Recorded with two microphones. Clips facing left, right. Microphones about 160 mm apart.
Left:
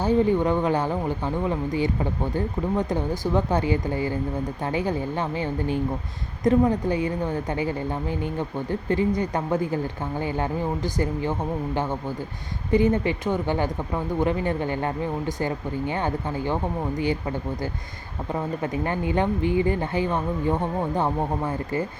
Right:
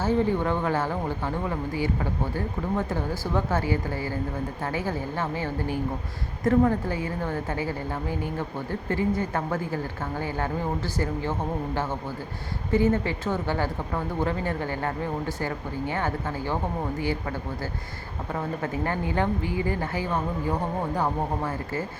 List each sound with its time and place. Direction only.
0.0 s speech: 15° left (ahead or behind)
8.9 s speech: 15° left (ahead or behind)